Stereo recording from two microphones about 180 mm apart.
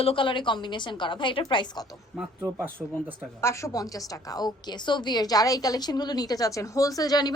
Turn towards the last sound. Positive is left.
turn(degrees=20)  # may be behind; listen again after turning